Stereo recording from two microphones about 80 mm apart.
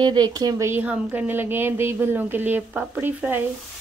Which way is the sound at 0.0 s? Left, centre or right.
Right.